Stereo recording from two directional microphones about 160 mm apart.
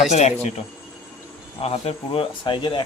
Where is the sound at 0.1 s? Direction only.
45° left (ahead or behind).